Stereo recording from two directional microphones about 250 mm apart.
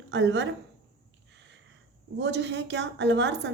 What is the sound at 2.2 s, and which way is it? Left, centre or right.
A woman's voice, right.